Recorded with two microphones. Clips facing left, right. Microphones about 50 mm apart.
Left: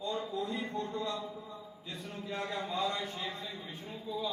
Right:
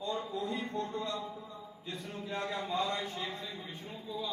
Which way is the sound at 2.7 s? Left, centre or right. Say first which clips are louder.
Right 1 dB; right.